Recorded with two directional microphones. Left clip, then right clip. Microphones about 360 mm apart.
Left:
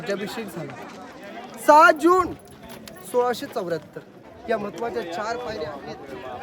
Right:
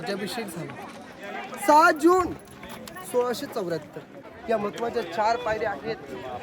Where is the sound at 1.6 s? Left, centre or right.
Centre.